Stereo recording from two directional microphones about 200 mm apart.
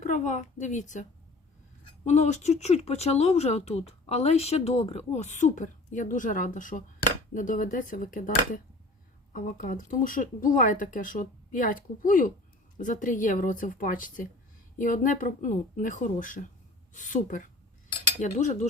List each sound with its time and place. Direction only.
0.0 s speech: 35° left (ahead or behind)
2.0 s speech: 35° left (ahead or behind)